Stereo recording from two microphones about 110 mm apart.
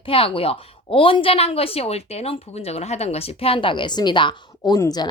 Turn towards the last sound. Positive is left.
turn(degrees=40)  # may be behind; listen again after turning